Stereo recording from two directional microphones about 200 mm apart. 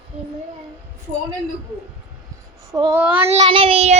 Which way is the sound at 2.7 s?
15° right (ahead or behind).